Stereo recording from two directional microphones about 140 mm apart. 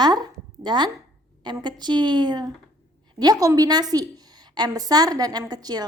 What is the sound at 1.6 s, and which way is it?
A woman's voice, 35° right (ahead or behind).